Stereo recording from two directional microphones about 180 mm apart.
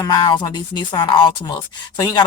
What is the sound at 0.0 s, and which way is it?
Speech, 25° left (ahead or behind).